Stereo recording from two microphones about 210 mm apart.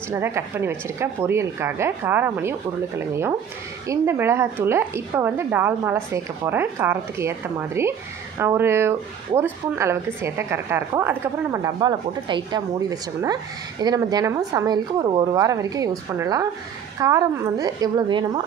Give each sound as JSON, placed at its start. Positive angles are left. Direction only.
{"t": 0.1, "sound": "speech", "side_deg": -10}
{"t": 3.8, "sound": "a woman's voice", "side_deg": -15}